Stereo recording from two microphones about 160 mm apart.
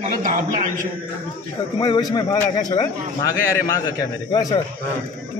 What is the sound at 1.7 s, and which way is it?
A man's voice, 30° left (ahead or behind).